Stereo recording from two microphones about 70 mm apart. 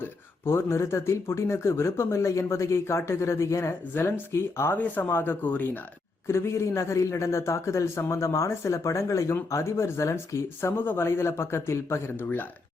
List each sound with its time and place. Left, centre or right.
0.0 s speech: left
6.2 s a man's voice: left